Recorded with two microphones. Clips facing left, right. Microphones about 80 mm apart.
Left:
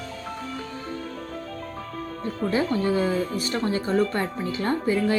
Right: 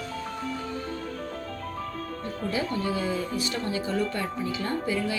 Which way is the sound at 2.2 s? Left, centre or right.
Left.